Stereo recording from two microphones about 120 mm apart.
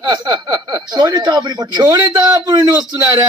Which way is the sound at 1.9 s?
15° right (ahead or behind).